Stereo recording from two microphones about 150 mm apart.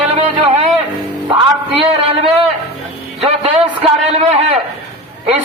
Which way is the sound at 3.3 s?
40° right (ahead or behind).